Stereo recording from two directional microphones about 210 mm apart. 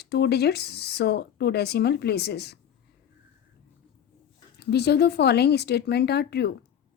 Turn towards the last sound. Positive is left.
turn(degrees=50)  # may be behind; listen again after turning